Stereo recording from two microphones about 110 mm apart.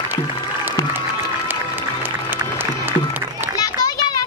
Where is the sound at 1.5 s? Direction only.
20° right (ahead or behind).